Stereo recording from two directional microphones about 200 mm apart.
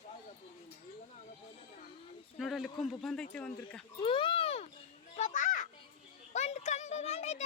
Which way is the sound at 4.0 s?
25° left (ahead or behind).